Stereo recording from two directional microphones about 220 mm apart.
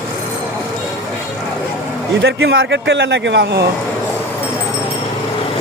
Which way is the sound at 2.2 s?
50° right (ahead or behind).